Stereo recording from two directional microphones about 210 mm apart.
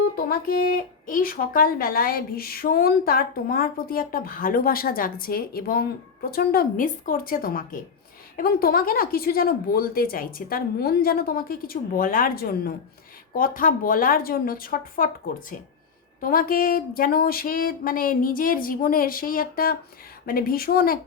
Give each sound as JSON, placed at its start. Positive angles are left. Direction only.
{"t": 0.2, "sound": "speech", "side_deg": 45}